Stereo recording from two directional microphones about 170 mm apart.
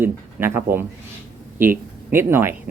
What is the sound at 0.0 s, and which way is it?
Speech, 15° right (ahead or behind).